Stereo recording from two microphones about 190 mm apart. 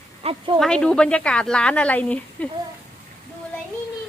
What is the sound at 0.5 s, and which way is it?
Speech, 5° left (ahead or behind).